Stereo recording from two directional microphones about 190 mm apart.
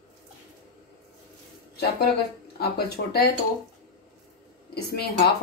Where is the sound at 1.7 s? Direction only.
60° left (ahead or behind).